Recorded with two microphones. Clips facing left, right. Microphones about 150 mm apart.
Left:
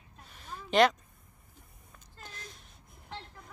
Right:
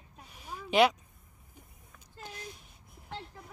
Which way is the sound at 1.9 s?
15° right (ahead or behind).